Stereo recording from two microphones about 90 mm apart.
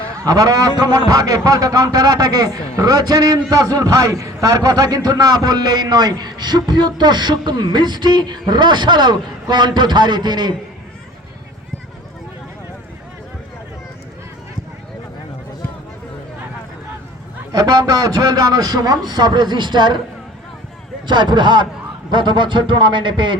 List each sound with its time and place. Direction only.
0.3 s a man's voice: 45° right (ahead or behind)
17.5 s a man's voice: 50° right (ahead or behind)
21.1 s a man's voice: 60° right (ahead or behind)